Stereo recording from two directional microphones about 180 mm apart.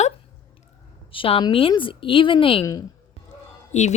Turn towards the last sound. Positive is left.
turn(degrees=40)  # may be behind; listen again after turning